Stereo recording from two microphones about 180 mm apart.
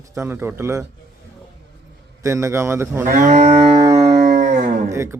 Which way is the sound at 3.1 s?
45° right (ahead or behind).